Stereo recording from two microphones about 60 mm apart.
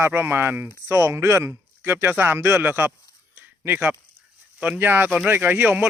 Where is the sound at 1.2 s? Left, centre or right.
Right.